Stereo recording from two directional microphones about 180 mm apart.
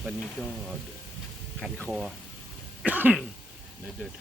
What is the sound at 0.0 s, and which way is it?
Speech, centre (ahead or behind).